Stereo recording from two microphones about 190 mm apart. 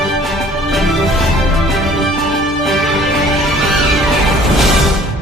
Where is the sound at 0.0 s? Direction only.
Centre (ahead or behind).